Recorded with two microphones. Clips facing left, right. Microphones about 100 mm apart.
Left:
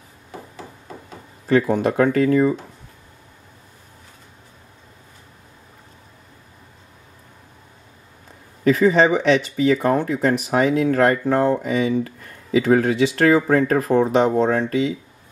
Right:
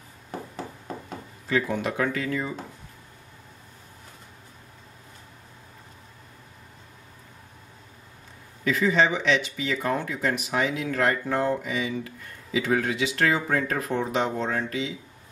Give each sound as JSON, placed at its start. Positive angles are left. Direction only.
{"t": 1.5, "sound": "speech", "side_deg": 40}
{"t": 8.6, "sound": "speech", "side_deg": 45}